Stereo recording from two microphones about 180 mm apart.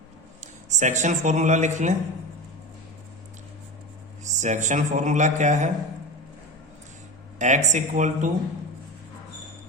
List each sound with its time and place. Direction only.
0.7 s a man's voice: 40° right (ahead or behind)
4.2 s a man's voice: 40° right (ahead or behind)
7.3 s a man's voice: 40° right (ahead or behind)